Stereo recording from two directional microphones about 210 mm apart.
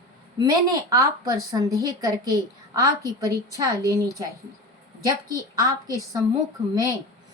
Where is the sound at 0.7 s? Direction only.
15° right (ahead or behind).